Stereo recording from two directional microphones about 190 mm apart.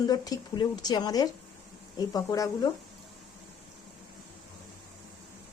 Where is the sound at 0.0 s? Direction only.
20° left (ahead or behind).